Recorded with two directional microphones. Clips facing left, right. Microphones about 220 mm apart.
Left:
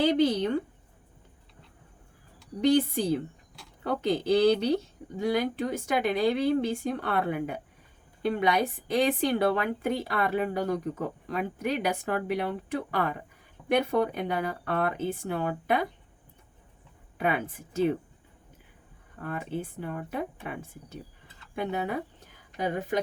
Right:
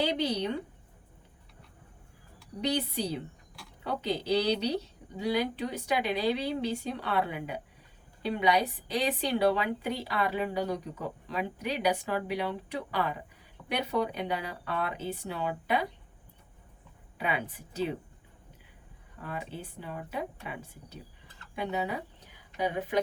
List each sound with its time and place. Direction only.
0.0 s a woman's voice: 50° left (ahead or behind)
2.6 s a woman's voice: 50° left (ahead or behind)
17.2 s a woman's voice: 50° left (ahead or behind)
19.2 s a woman's voice: 50° left (ahead or behind)